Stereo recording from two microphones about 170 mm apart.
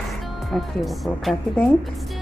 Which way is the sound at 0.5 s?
Centre (ahead or behind).